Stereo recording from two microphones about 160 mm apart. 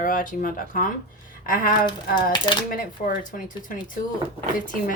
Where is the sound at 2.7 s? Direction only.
60° left (ahead or behind).